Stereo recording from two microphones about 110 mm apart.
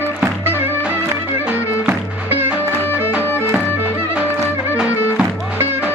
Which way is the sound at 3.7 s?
15° right (ahead or behind).